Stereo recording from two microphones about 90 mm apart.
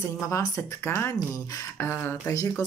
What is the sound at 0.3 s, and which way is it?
Speech, 30° left (ahead or behind).